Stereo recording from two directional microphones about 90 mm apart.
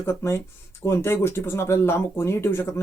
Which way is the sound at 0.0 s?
30° left (ahead or behind).